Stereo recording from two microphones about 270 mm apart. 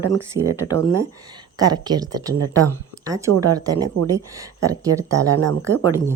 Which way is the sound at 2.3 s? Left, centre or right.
Right.